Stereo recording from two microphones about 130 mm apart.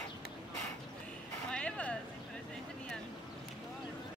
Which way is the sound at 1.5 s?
10° left (ahead or behind).